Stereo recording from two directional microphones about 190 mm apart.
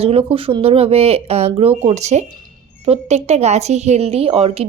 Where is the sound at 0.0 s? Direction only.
30° right (ahead or behind).